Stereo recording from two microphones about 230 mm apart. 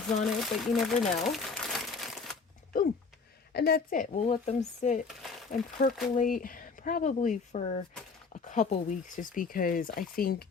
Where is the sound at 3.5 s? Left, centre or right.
Left.